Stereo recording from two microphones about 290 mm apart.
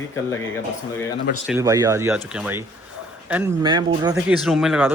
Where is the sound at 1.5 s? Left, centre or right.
Centre.